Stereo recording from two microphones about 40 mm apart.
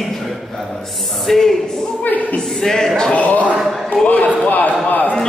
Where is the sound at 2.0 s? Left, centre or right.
Left.